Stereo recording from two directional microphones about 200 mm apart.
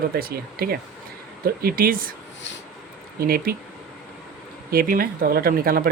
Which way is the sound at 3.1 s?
50° right (ahead or behind).